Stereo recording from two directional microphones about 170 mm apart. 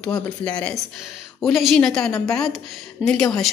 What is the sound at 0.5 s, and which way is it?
A woman's voice, 5° left (ahead or behind).